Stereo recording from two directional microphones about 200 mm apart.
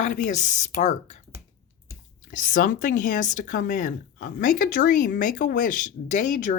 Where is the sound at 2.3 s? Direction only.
40° left (ahead or behind).